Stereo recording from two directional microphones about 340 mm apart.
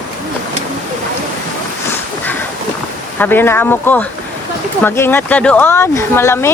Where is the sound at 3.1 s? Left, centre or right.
Centre.